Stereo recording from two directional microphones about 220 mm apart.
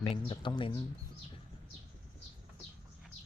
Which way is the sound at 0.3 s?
20° left (ahead or behind).